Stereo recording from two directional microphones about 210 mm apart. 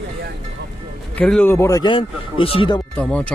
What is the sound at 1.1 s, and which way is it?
Speech, 5° left (ahead or behind).